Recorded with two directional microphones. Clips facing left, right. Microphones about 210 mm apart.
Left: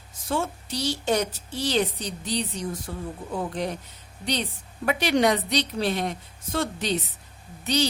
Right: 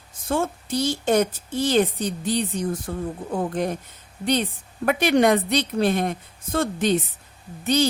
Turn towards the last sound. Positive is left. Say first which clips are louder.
# right 4 dB
turn(degrees=-50)  # may be behind; listen again after turning